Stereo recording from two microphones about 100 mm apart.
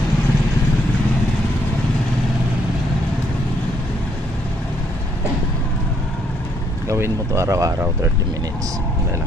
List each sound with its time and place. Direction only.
6.8 s speech: 30° right (ahead or behind)